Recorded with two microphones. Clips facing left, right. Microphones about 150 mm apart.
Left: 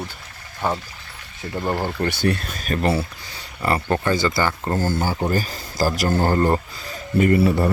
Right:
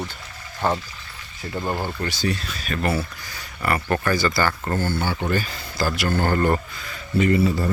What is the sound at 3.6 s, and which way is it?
Speech, 25° left (ahead or behind).